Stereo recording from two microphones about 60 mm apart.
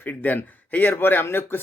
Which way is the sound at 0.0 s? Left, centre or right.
Left.